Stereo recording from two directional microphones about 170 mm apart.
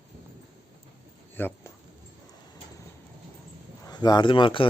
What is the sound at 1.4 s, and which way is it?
Speech, 15° left (ahead or behind).